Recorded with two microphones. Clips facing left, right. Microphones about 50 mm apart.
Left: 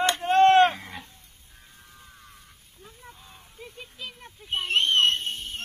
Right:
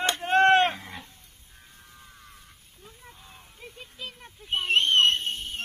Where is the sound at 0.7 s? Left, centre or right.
Centre.